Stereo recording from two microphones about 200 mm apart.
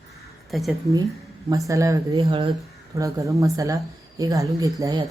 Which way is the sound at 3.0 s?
15° right (ahead or behind).